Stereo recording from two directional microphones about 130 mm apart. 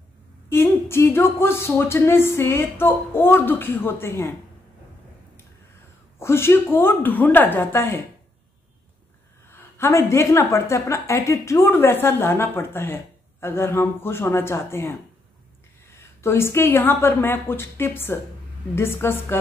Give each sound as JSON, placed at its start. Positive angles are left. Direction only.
{"t": 0.5, "sound": "a woman's voice", "side_deg": 20}
{"t": 6.1, "sound": "a woman's voice", "side_deg": 20}
{"t": 9.5, "sound": "a woman's voice", "side_deg": 20}
{"t": 16.2, "sound": "a woman's voice", "side_deg": 20}